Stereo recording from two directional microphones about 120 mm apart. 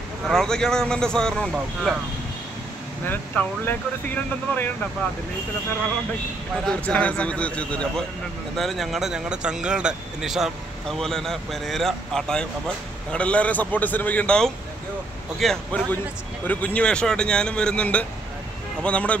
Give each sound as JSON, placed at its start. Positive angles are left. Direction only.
{"t": 0.2, "sound": "speech", "side_deg": 5}
{"t": 3.1, "sound": "speech", "side_deg": 15}
{"t": 6.6, "sound": "speech", "side_deg": 10}